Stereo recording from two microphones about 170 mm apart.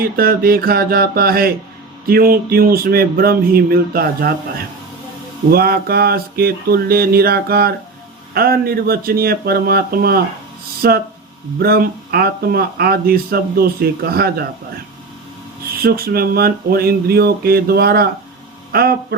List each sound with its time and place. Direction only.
0.0 s speech: 60° right (ahead or behind)
5.5 s speech: 65° right (ahead or behind)
15.8 s speech: 65° right (ahead or behind)